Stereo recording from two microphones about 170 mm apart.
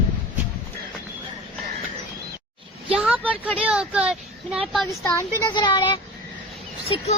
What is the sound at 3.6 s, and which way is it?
Speech, 5° right (ahead or behind).